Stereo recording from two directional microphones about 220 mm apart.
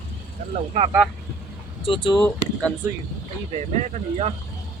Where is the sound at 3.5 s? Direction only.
30° right (ahead or behind).